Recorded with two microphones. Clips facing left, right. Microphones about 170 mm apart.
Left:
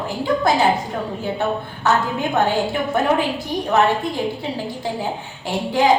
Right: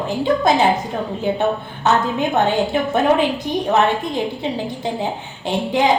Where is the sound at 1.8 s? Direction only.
20° right (ahead or behind).